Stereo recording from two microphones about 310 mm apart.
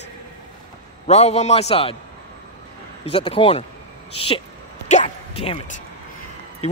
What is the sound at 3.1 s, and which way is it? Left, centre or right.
Speech, centre.